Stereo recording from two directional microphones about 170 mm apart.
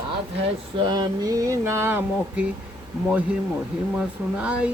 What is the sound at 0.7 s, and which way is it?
Speech, 25° right (ahead or behind).